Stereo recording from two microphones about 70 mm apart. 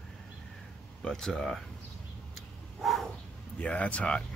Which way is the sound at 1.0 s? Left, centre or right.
Centre.